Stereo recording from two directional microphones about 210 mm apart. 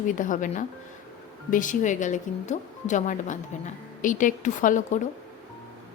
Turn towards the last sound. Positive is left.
turn(degrees=35)  # may be behind; listen again after turning